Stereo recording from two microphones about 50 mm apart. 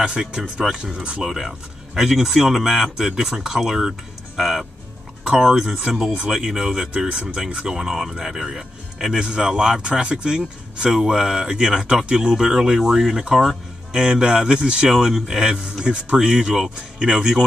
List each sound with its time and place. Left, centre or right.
0.0 s speech: centre
9.8 s speech: centre